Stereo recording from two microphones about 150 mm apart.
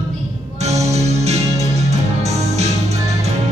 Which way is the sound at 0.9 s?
45° right (ahead or behind).